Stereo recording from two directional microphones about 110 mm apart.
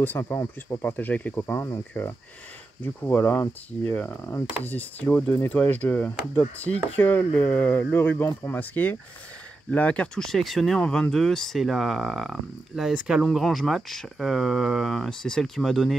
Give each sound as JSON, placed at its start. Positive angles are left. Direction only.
{"t": 0.0, "sound": "speech", "side_deg": 20}